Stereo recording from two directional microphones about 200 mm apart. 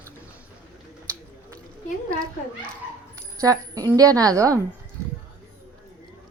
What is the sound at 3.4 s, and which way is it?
Speech, 15° right (ahead or behind).